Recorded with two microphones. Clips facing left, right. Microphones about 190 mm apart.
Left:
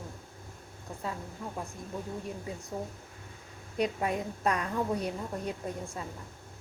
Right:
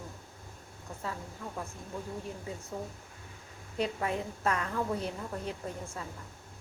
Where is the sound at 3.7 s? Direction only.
15° left (ahead or behind).